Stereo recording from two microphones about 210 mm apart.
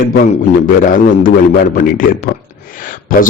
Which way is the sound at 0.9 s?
40° left (ahead or behind).